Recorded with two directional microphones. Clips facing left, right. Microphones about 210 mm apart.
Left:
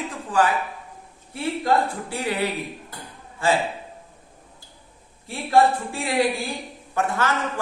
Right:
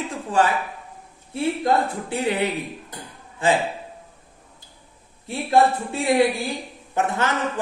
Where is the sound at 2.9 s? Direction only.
20° right (ahead or behind).